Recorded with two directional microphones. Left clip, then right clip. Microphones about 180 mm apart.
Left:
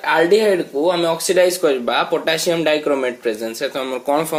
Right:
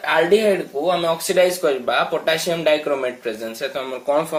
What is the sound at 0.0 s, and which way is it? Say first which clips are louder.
Speech: left 2 dB; 50° left (ahead or behind).